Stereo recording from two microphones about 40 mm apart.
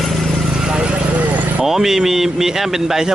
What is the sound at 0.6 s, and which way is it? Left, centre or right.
Vehicle, centre.